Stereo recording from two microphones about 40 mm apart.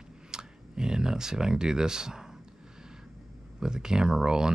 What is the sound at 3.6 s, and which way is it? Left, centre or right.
Speech, centre.